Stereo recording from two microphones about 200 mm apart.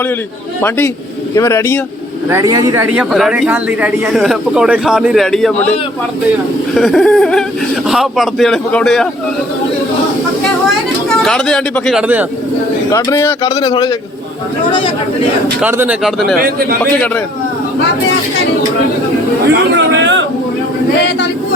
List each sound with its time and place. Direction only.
1.4 s speech: 15° left (ahead or behind)
2.3 s a man's voice: 20° right (ahead or behind); by 5.7 s 5° left (ahead or behind)
6.7 s a man's voice: centre (ahead or behind)
11.2 s a man's voice: 5° left (ahead or behind)
12.9 s speech: 15° left (ahead or behind)
13.4 s a man's voice: 25° left (ahead or behind)
15.6 s a man's voice: 5° right (ahead or behind)
19.7 s a sound: 65° right (ahead or behind)